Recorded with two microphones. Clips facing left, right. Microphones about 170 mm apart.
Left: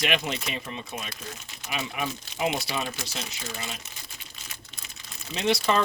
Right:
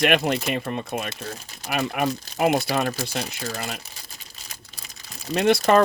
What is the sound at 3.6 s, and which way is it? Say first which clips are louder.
Speech: right 6 dB; 55° right (ahead or behind).